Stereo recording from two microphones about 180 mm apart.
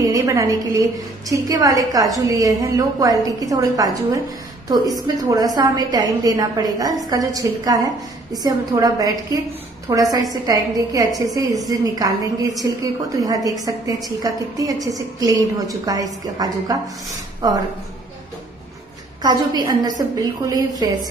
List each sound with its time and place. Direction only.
0.0 s a woman's voice: 15° right (ahead or behind)
19.2 s a woman's voice: 20° right (ahead or behind)